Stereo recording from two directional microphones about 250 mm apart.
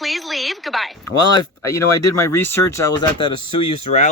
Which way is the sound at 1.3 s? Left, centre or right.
Centre.